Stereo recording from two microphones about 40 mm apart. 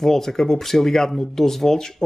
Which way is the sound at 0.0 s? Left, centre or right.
Centre.